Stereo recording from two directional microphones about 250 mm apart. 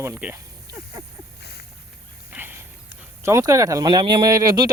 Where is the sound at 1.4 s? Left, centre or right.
Left.